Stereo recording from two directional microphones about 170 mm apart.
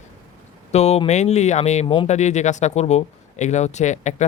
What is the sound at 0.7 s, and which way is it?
Speech, 40° left (ahead or behind).